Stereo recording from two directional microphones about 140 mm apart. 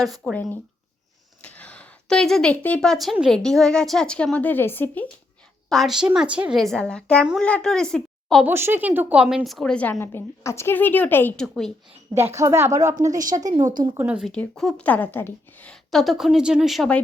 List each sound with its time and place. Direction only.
0.3 s a woman's voice: 10° left (ahead or behind)
5.6 s a woman's voice: centre (ahead or behind)
8.4 s a woman's voice: 15° right (ahead or behind); by 11.4 s 15° left (ahead or behind)
11.4 s a woman's voice: centre (ahead or behind)
12.3 s a woman's voice: 20° right (ahead or behind)
14.0 s speech: 10° right (ahead or behind)
14.3 s a woman's voice: 5° left (ahead or behind)